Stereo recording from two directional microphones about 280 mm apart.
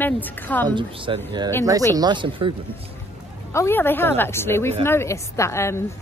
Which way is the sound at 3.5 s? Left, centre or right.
Centre.